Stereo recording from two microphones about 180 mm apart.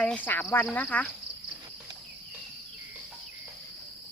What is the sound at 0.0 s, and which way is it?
Speech, 10° left (ahead or behind).